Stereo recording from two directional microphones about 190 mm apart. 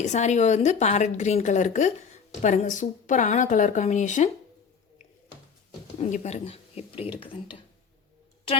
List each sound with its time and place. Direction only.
0.0 s a woman's voice: 40° left (ahead or behind)
6.0 s a woman's voice: 35° left (ahead or behind)